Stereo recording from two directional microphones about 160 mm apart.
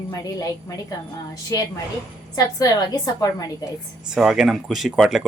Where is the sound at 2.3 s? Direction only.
20° left (ahead or behind).